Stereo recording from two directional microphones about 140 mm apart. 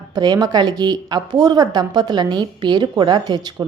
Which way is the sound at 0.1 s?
30° right (ahead or behind).